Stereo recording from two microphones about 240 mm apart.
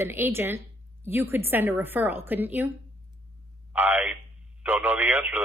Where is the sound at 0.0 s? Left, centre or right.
Centre.